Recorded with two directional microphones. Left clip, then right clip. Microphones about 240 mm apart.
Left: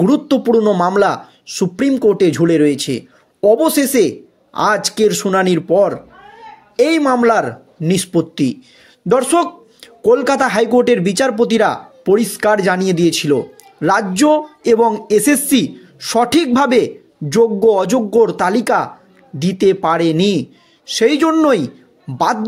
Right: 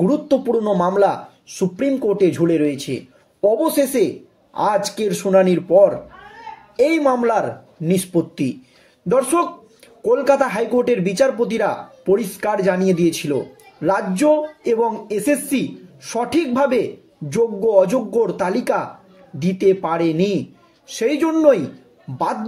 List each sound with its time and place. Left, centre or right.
0.0 s speech: left